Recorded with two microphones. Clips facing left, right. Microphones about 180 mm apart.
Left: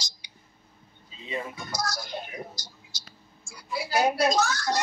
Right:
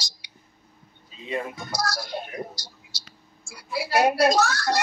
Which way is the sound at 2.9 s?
70° right (ahead or behind).